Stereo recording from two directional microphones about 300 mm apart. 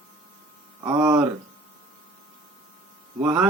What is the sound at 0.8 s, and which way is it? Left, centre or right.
Speech, centre.